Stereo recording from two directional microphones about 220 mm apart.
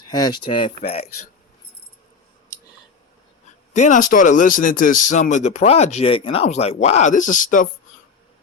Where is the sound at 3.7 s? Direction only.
35° left (ahead or behind).